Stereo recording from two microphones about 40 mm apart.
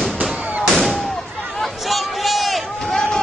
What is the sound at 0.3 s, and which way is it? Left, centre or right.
Fireworks, right.